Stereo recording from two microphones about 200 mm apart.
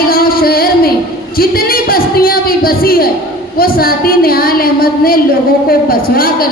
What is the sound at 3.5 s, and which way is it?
A woman's voice, 45° left (ahead or behind).